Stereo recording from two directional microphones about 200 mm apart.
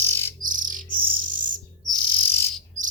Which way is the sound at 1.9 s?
15° left (ahead or behind).